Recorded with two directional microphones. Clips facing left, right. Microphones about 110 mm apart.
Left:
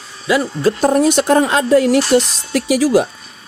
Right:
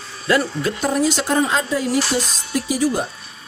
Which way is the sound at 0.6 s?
40° left (ahead or behind).